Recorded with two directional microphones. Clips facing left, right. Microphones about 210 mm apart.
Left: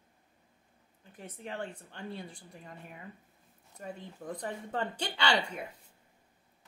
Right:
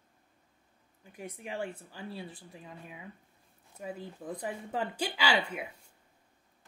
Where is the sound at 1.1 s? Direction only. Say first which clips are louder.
Right 2 dB; 10° right (ahead or behind).